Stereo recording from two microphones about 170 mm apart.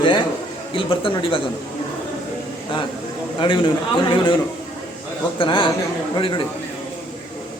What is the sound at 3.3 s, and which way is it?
A man's voice, 30° left (ahead or behind).